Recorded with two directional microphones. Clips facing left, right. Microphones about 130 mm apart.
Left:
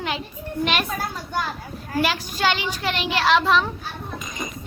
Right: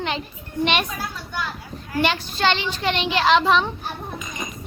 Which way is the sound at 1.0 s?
45° left (ahead or behind).